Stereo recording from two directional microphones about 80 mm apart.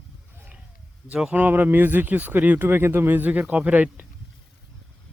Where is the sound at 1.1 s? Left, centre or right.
Centre.